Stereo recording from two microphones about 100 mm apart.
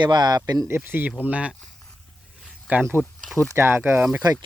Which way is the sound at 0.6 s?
20° right (ahead or behind).